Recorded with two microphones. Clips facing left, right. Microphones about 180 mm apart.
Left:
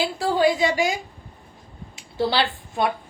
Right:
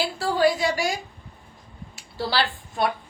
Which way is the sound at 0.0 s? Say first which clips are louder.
Left 1 dB; 20° left (ahead or behind).